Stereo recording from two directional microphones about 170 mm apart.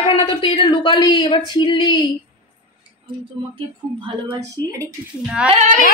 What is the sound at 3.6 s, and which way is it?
Speech, 30° right (ahead or behind).